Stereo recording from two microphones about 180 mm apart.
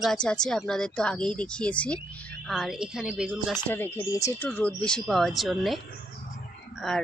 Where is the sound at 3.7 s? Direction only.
10° left (ahead or behind).